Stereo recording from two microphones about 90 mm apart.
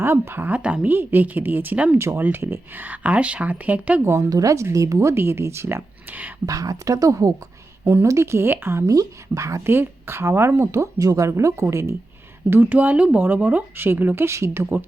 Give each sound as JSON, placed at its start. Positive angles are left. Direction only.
{"t": 0.0, "sound": "speech", "side_deg": -25}
{"t": 2.0, "sound": "speech", "side_deg": -30}
{"t": 4.0, "sound": "speech", "side_deg": -35}
{"t": 6.4, "sound": "speech", "side_deg": -40}
{"t": 8.9, "sound": "speech", "side_deg": -40}